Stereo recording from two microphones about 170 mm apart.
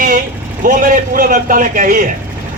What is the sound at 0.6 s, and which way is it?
A man's voice, 50° right (ahead or behind).